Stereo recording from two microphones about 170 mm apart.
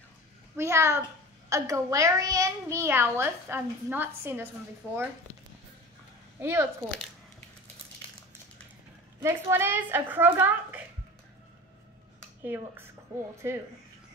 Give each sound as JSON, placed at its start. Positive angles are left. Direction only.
{"t": 0.6, "sound": "a child's voice", "side_deg": -15}
{"t": 6.4, "sound": "a child's voice", "side_deg": -15}
{"t": 9.2, "sound": "a child's voice", "side_deg": -15}
{"t": 12.4, "sound": "a child's voice", "side_deg": -10}